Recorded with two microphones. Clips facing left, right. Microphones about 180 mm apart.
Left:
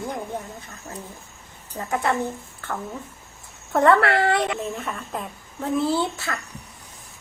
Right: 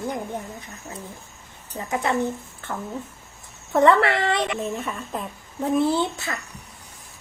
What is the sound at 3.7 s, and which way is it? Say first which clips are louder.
Speech: even; 20° right (ahead or behind).